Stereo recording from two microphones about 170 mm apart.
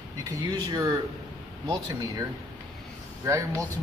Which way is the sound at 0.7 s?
20° right (ahead or behind).